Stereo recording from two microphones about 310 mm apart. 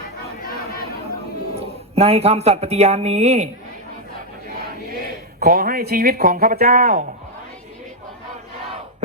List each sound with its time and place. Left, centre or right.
1.5 s speech: centre
5.4 s speech: right